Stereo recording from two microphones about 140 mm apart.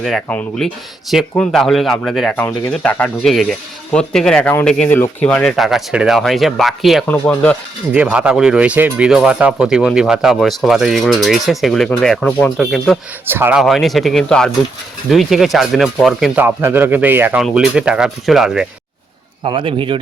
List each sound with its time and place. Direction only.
0.0 s speech: centre (ahead or behind)
7.9 s speech: 10° right (ahead or behind)
13.3 s speech: 15° right (ahead or behind)
13.6 s speech: centre (ahead or behind)
16.4 s speech: 15° right (ahead or behind)
19.5 s speech: 40° right (ahead or behind)